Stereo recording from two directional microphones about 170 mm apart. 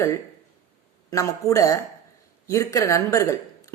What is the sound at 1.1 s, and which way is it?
A woman's voice, 20° left (ahead or behind).